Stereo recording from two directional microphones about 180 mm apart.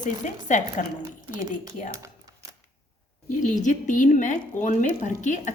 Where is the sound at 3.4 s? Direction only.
45° left (ahead or behind).